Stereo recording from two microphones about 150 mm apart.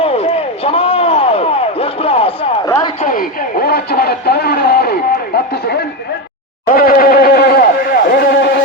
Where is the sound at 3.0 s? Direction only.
70° left (ahead or behind); by 5.0 s 90° left.